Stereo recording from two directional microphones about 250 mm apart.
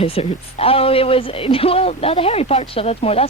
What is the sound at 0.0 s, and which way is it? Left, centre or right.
Speech, left.